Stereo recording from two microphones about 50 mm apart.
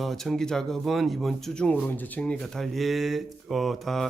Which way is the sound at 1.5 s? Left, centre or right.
Centre.